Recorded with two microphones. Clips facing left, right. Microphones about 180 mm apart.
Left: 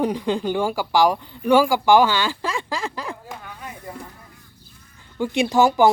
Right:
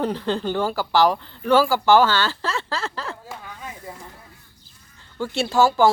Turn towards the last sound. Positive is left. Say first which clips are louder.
# left 1 dB
turn(degrees=15)  # may be behind; listen again after turning